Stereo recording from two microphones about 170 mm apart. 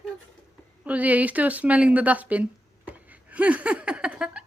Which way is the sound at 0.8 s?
10° right (ahead or behind).